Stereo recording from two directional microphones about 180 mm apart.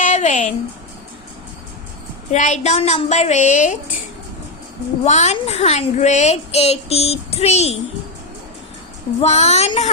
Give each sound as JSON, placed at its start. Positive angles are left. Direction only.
{"t": 0.0, "sound": "a sound", "side_deg": 40}
{"t": 2.3, "sound": "a woman's voice", "side_deg": 40}
{"t": 5.0, "sound": "a woman's voice", "side_deg": 40}
{"t": 9.2, "sound": "a woman's voice", "side_deg": 35}